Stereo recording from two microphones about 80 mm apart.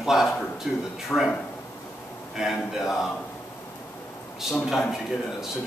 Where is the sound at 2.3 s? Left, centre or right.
Centre.